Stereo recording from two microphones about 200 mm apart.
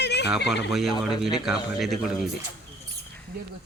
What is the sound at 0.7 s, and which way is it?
Speech, centre (ahead or behind).